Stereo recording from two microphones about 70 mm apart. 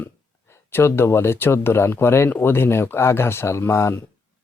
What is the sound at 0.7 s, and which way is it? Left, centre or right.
Speech, left.